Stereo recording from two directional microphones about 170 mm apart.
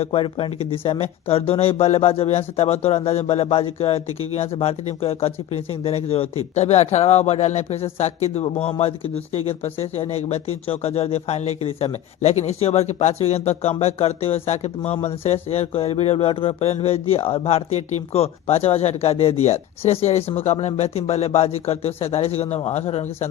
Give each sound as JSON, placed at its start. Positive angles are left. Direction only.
{"t": 0.0, "sound": "speech", "side_deg": 35}